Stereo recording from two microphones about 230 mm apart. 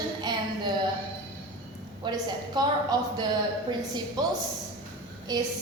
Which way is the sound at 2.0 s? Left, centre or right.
Centre.